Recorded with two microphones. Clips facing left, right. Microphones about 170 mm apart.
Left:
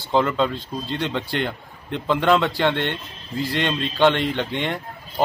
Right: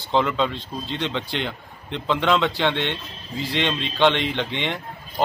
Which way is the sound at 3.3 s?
50° left (ahead or behind).